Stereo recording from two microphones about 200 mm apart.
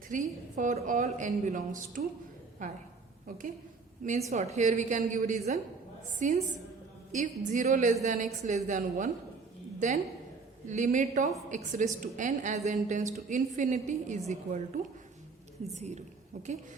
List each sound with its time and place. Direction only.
0.1 s a woman's voice: 40° right (ahead or behind)